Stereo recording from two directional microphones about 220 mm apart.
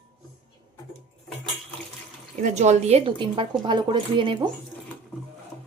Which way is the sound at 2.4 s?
30° right (ahead or behind).